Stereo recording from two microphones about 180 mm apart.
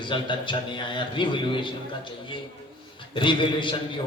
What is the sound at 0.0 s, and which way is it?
A man's voice, 25° left (ahead or behind).